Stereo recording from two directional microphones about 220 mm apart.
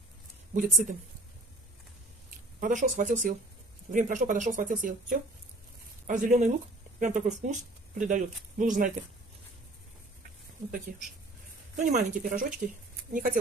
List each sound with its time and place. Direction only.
0.6 s speech: 40° right (ahead or behind)
2.6 s speech: 35° right (ahead or behind)
11.8 s speech: 35° right (ahead or behind)